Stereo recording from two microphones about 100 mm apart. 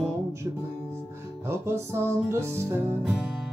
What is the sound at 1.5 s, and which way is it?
Music, 25° right (ahead or behind).